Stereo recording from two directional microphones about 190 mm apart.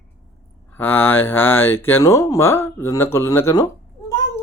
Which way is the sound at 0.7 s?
10° left (ahead or behind).